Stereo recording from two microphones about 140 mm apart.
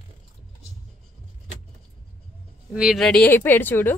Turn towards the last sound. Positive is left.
turn(degrees=15)  # may be behind; listen again after turning